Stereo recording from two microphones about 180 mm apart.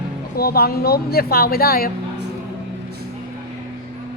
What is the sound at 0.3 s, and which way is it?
A woman's voice, 60° left (ahead or behind).